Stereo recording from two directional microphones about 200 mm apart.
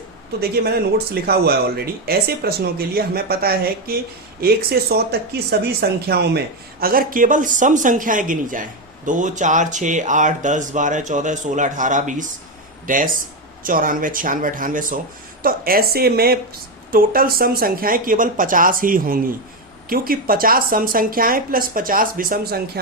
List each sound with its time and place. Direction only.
0.3 s speech: 50° right (ahead or behind)